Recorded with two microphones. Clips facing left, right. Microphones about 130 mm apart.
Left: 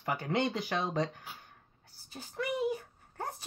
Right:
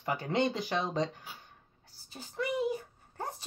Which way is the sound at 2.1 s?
35° right (ahead or behind).